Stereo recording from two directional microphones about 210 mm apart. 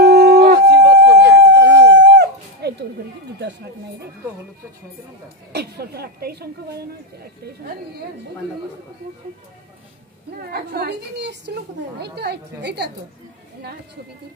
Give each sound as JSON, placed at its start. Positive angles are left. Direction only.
{"t": 0.0, "sound": "howl", "side_deg": -50}
{"t": 0.7, "sound": "a sound", "side_deg": -55}
{"t": 5.5, "sound": "a woman's voice", "side_deg": -50}
{"t": 10.3, "sound": "a woman's voice", "side_deg": -45}